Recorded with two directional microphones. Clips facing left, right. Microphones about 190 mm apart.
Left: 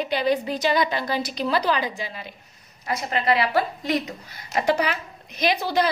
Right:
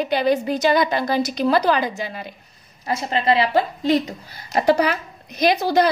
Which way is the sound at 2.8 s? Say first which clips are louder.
Right 3 dB; 30° right (ahead or behind).